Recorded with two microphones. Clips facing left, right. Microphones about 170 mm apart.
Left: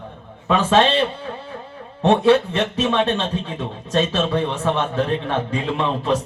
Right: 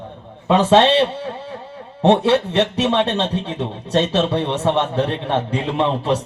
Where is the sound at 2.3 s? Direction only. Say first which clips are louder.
Right 1 dB; 70° right (ahead or behind).